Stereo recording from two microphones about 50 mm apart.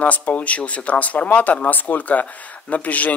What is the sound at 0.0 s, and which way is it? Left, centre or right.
Speech, left.